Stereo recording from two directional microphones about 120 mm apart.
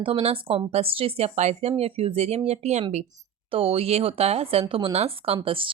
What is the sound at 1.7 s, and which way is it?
Speech, 55° right (ahead or behind).